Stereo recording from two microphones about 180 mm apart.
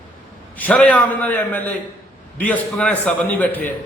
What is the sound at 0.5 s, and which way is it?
A man's voice, 10° left (ahead or behind).